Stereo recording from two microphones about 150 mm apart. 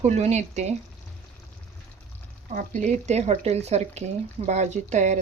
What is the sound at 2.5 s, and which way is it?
Speech, 55° right (ahead or behind).